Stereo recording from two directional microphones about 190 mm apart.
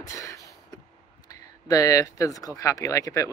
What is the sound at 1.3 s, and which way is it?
Speech, 20° left (ahead or behind).